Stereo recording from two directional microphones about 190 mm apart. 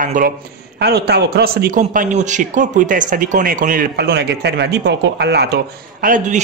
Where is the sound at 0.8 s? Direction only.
60° right (ahead or behind).